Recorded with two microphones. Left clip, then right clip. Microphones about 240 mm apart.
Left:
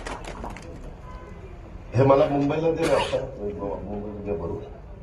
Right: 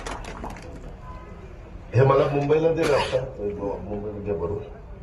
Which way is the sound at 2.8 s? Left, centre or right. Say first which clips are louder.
Right 1 dB; centre.